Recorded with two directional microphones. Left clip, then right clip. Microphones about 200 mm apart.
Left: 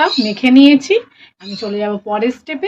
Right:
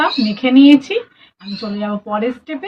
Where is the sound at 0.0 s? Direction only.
50° left (ahead or behind).